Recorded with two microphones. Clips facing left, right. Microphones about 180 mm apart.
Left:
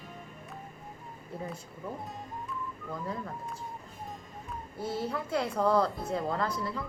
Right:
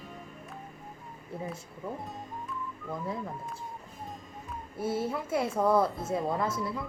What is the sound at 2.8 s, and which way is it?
Speech, 5° right (ahead or behind).